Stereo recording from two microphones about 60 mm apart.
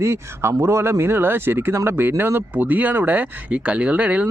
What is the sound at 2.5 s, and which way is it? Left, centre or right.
A man's voice, right.